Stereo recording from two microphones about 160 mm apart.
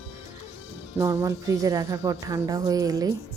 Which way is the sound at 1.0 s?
20° right (ahead or behind).